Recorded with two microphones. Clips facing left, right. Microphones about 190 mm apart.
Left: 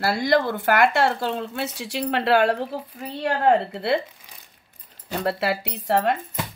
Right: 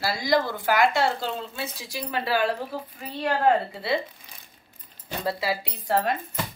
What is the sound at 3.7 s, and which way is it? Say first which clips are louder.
Speech: left 4 dB; 65° left (ahead or behind).